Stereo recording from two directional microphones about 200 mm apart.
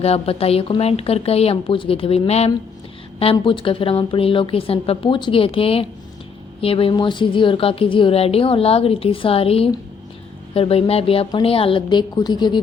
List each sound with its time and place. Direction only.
0.0 s a woman's voice: 30° left (ahead or behind)